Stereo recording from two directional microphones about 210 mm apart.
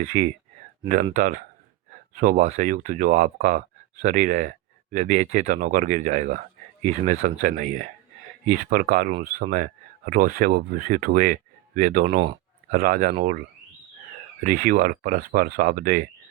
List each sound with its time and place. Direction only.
0.0 s speech: 40° right (ahead or behind)
14.4 s speech: 40° right (ahead or behind)